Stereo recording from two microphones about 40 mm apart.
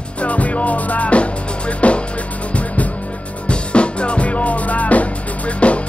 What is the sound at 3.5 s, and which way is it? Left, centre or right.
Music, left.